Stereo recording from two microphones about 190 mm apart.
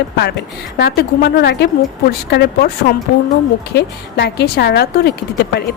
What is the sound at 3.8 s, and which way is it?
Speech, 60° left (ahead or behind).